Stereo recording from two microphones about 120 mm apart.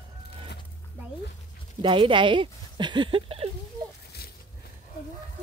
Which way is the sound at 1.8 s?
45° right (ahead or behind).